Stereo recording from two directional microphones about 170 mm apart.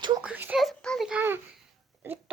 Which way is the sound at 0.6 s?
5° left (ahead or behind).